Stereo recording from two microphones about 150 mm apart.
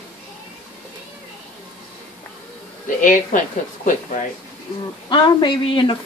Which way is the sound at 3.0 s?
60° left (ahead or behind).